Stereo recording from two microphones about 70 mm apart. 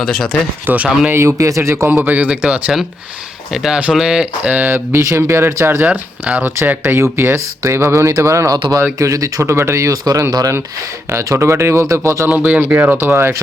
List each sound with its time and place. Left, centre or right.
0.0 s speech: centre
0.6 s speech: right
1.4 s speech: right
1.9 s speech: right
3.5 s speech: centre
4.5 s speech: right
5.8 s speech: centre
6.4 s speech: right
10.0 s speech: right
11.1 s speech: right
12.3 s speech: right